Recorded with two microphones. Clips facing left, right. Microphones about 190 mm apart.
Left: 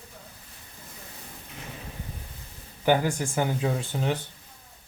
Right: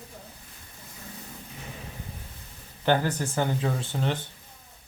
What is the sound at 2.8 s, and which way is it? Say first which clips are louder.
Speech: left 1 dB; 10° left (ahead or behind).